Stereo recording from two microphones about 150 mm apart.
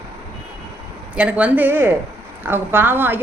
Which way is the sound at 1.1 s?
10° right (ahead or behind).